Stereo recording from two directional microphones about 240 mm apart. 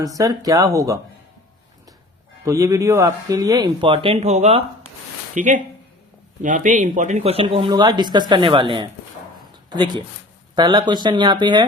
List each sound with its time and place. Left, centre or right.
0.0 s speech: centre
2.4 s speech: centre